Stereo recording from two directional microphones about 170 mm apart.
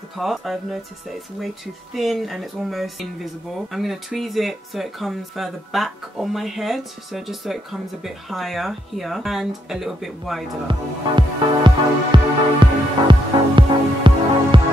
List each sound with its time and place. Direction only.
0.2 s speech: centre (ahead or behind)
2.0 s speech: centre (ahead or behind)
10.7 s music: 30° right (ahead or behind)